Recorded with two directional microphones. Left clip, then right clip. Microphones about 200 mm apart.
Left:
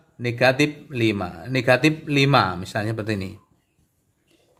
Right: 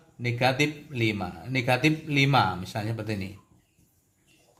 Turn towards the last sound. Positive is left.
turn(degrees=50)  # may be behind; listen again after turning